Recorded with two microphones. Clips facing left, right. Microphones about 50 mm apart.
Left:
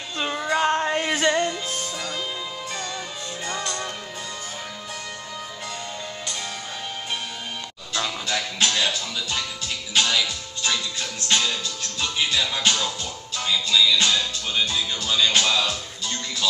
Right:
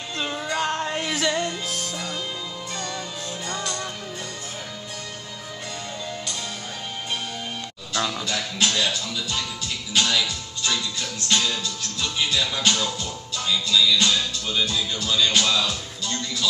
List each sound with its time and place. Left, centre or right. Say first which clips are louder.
0.2 s music: left 3 dB; centre
0.6 s a sound: left 4 dB; centre
1.3 s music: left 2 dB; centre
8.3 s speech: left 1 dB; left
8.7 s speech: even; centre
9.9 s music: even; centre